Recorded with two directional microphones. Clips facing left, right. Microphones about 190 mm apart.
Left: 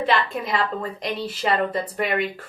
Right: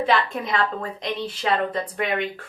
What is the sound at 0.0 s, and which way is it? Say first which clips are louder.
Speech: right 1 dB; centre (ahead or behind).